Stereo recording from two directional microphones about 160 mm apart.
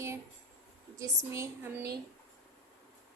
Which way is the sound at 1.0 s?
20° right (ahead or behind).